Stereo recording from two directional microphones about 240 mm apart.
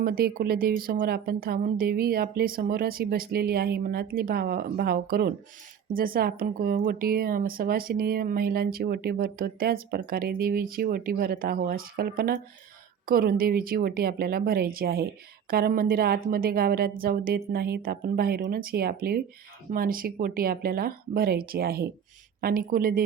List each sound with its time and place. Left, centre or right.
0.0 s a woman's voice: right